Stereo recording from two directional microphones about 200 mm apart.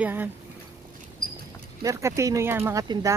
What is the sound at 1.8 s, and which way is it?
Speech, 15° right (ahead or behind).